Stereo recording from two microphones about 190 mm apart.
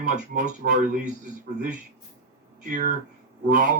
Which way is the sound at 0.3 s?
40° right (ahead or behind).